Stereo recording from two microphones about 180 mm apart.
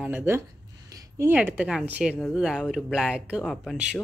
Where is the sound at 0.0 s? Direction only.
10° right (ahead or behind).